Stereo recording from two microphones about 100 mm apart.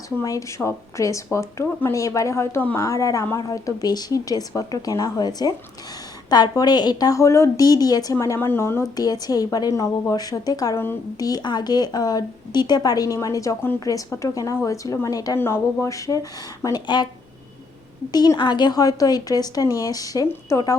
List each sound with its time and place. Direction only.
0.2 s speech: 30° left (ahead or behind)
2.7 s speech: 30° left (ahead or behind)
6.6 s speech: 45° left (ahead or behind)
18.1 s speech: 40° left (ahead or behind)